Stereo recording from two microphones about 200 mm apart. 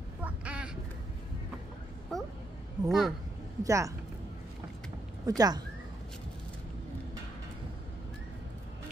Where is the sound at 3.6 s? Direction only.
15° right (ahead or behind).